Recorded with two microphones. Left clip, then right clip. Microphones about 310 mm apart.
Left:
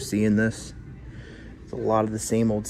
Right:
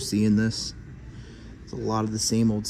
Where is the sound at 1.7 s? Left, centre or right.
Centre.